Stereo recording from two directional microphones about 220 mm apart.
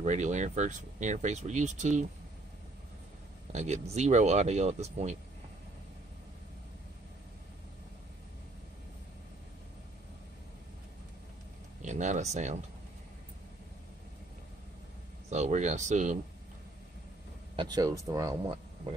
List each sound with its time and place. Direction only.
0.0 s speech: 30° right (ahead or behind)
3.5 s speech: 30° right (ahead or behind)
11.8 s speech: 35° right (ahead or behind)
15.2 s speech: 30° right (ahead or behind)
17.6 s speech: 20° right (ahead or behind)